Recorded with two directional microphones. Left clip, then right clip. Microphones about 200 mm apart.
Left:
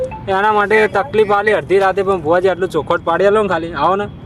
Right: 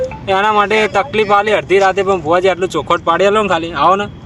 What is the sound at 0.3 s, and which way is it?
Speech, 5° left (ahead or behind).